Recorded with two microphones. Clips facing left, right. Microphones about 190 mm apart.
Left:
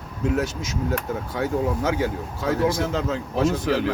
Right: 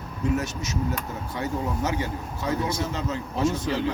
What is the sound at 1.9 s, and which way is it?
A man's voice, 90° left.